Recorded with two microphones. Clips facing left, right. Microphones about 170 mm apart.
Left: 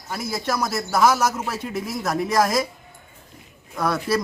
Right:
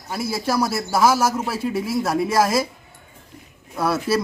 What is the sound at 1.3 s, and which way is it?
Speech, 10° right (ahead or behind).